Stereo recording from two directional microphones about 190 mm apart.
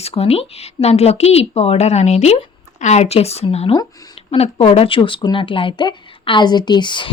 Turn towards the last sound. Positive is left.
turn(degrees=25)  # may be behind; listen again after turning